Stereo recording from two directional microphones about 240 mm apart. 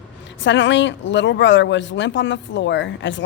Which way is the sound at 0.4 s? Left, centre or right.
Left.